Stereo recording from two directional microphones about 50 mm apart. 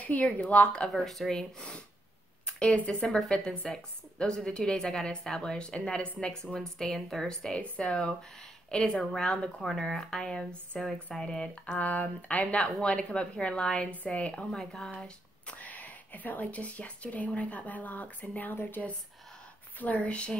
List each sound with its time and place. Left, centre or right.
0.0 s speech: left
1.0 s a woman's voice: centre
2.4 s a sound: centre
2.8 s a woman's voice: left
11.6 s speech: left
14.5 s a woman's voice: centre
15.5 s speech: left
18.5 s speech: left
19.8 s speech: left